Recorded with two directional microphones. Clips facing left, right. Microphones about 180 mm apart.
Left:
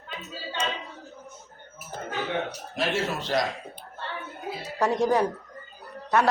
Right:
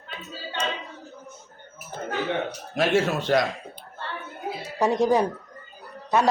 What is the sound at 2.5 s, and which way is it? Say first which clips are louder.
Speech: right 6 dB; 55° right (ahead or behind).